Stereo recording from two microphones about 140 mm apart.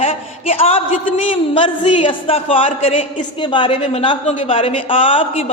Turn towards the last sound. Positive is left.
turn(degrees=40)  # may be behind; listen again after turning